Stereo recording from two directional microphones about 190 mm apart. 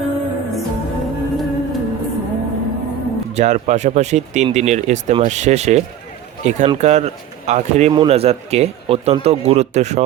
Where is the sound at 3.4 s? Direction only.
35° right (ahead or behind).